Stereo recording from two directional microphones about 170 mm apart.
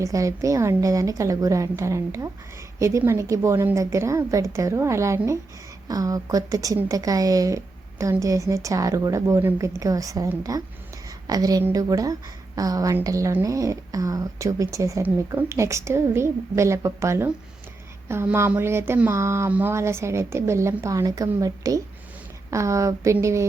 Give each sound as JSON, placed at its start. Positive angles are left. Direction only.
{"t": 0.0, "sound": "speech", "side_deg": -20}